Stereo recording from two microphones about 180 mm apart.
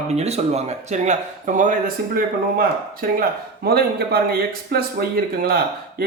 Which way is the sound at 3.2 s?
60° right (ahead or behind).